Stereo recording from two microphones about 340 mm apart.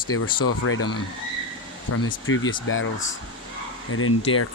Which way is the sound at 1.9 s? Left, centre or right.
Left.